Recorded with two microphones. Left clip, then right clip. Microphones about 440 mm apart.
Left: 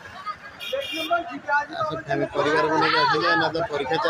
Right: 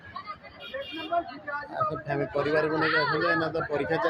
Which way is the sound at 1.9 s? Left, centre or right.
Right.